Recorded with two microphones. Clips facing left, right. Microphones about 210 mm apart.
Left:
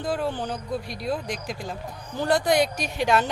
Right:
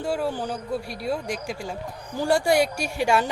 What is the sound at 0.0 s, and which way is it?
Speech, 10° right (ahead or behind).